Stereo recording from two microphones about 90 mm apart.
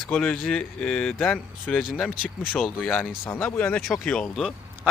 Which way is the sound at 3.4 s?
20° left (ahead or behind).